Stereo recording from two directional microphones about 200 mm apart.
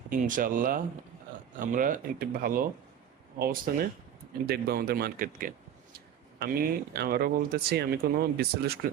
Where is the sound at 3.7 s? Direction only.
50° right (ahead or behind).